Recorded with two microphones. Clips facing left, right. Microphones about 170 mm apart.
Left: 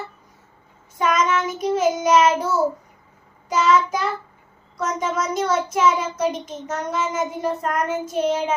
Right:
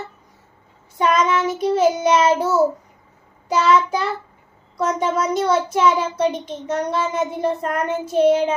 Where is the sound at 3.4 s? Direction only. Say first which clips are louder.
Right 2 dB; 35° right (ahead or behind).